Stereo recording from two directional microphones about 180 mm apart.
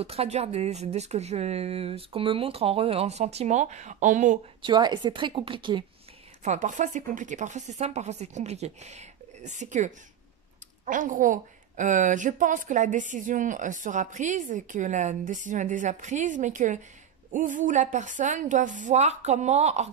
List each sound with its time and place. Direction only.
0.0 s speech: 35° right (ahead or behind)
4.6 s a woman's voice: 25° right (ahead or behind)
6.4 s a woman's voice: 40° right (ahead or behind)